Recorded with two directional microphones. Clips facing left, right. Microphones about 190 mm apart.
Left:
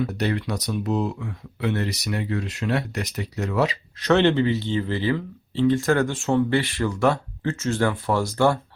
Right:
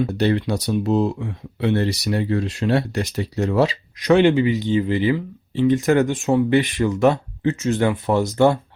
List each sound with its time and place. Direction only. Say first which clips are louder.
0.0 s speech: right 5 dB; 30° right (ahead or behind)
4.0 s speech: right 3 dB; 10° right (ahead or behind)